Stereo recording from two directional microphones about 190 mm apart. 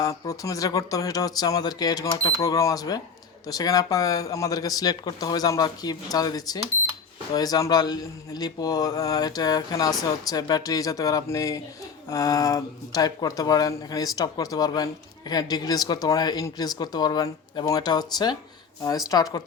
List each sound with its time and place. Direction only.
0.0 s speech: 15° left (ahead or behind)